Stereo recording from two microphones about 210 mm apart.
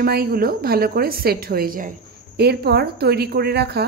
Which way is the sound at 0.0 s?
45° right (ahead or behind).